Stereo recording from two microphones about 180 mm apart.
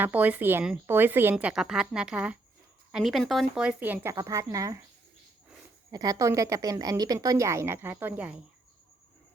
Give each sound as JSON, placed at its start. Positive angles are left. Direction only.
{"t": 0.0, "sound": "a woman's voice", "side_deg": -10}
{"t": 5.9, "sound": "a woman's voice", "side_deg": -20}